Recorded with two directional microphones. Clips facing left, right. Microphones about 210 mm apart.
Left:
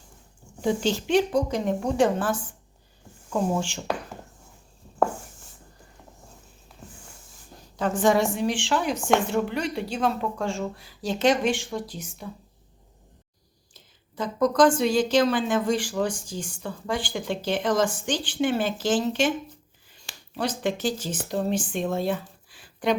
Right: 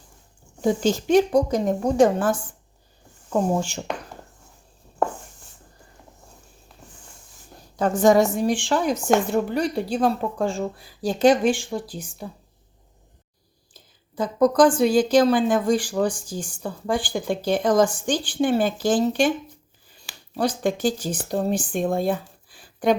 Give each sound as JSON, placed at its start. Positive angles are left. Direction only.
{"t": 0.6, "sound": "a woman's voice", "side_deg": -45}
{"t": 6.7, "sound": "a sound", "side_deg": 5}
{"t": 7.8, "sound": "speech", "side_deg": -40}
{"t": 14.3, "sound": "speech", "side_deg": -35}
{"t": 20.3, "sound": "speech", "side_deg": -40}